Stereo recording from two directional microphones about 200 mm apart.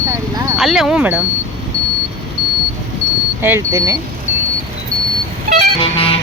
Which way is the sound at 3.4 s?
15° right (ahead or behind).